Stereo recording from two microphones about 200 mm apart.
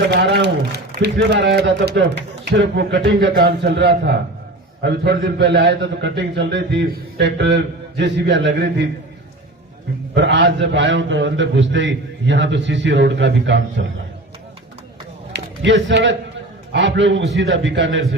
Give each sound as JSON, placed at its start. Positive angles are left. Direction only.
{"t": 0.1, "sound": "a man's voice", "side_deg": -55}
{"t": 10.2, "sound": "a man's voice", "side_deg": -60}
{"t": 15.3, "sound": "a man's voice", "side_deg": -65}